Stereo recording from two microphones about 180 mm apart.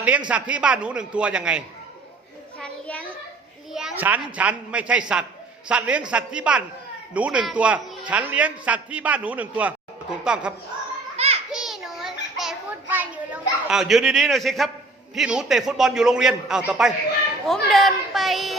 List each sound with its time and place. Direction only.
0.3 s a man's voice: 5° right (ahead or behind)
2.6 s a sound: 5° left (ahead or behind)
3.7 s a man's voice: centre (ahead or behind)
11.2 s children playing: 35° right (ahead or behind)
11.5 s child singing: centre (ahead or behind)
15.1 s a man's voice: 5° right (ahead or behind)